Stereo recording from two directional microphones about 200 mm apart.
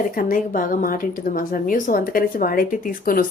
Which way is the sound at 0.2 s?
45° left (ahead or behind).